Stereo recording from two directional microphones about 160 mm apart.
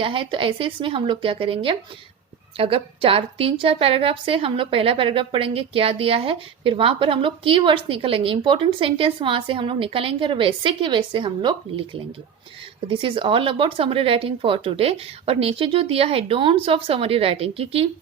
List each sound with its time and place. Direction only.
0.0 s a woman's voice: 30° right (ahead or behind)
12.9 s a woman's voice: 35° right (ahead or behind)